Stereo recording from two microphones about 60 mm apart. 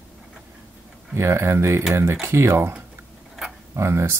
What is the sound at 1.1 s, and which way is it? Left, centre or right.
Speech, right.